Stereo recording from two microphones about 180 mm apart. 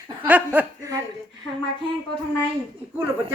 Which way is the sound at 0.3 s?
10° right (ahead or behind).